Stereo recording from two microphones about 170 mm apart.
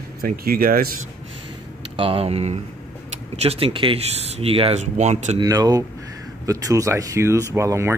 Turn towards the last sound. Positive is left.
turn(degrees=-15)  # may be behind; listen again after turning